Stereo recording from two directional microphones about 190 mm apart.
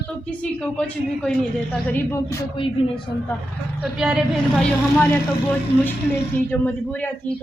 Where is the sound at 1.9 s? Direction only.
15° left (ahead or behind).